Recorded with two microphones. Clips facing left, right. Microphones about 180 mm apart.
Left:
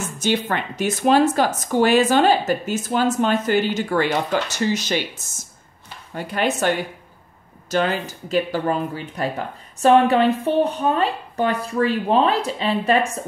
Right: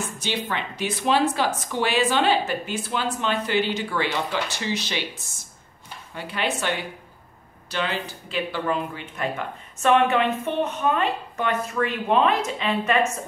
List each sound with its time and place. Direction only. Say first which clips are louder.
0.2 s speech: left 8 dB; 45° left (ahead or behind)